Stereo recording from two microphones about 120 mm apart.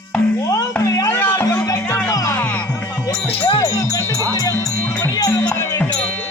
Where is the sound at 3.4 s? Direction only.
35° left (ahead or behind); by 6.2 s 15° left (ahead or behind).